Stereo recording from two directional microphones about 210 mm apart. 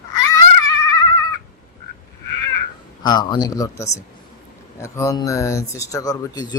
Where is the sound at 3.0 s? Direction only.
20° left (ahead or behind).